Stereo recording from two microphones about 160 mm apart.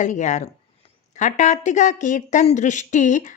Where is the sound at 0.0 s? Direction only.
50° left (ahead or behind).